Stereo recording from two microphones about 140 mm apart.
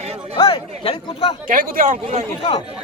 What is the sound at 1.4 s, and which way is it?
Speech, 80° right.